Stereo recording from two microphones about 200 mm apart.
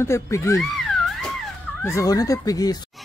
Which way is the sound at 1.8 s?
15° left (ahead or behind).